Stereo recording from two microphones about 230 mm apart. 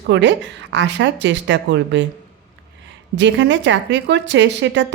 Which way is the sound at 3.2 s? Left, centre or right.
Right.